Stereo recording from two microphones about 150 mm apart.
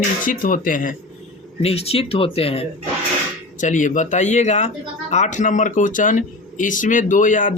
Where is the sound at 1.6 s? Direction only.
40° left (ahead or behind).